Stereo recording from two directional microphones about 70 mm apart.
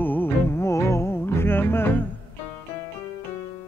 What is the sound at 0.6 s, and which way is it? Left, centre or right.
Music, left.